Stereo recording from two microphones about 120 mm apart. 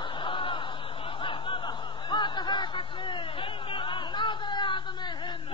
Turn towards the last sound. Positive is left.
turn(degrees=40)  # may be behind; listen again after turning